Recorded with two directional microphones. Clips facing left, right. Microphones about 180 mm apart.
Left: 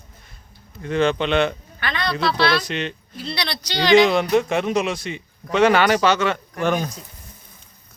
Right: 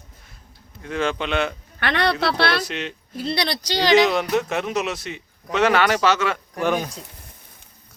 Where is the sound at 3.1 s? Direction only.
50° right (ahead or behind).